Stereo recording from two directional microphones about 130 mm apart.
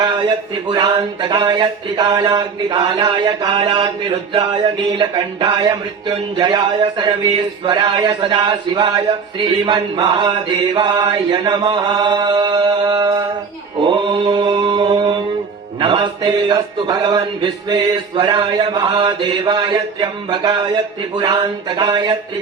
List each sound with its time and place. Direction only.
0.0 s a man's voice: 35° right (ahead or behind)
13.8 s mantra: 35° right (ahead or behind)
15.8 s a man's voice: 35° right (ahead or behind)